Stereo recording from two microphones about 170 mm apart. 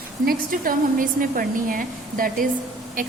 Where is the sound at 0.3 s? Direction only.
55° right (ahead or behind).